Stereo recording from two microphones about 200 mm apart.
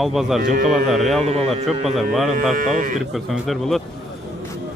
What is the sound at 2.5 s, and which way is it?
Speech, 45° right (ahead or behind).